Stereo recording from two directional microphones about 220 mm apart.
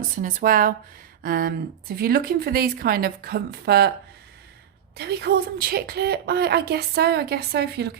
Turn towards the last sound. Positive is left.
turn(degrees=-50)  # may be behind; listen again after turning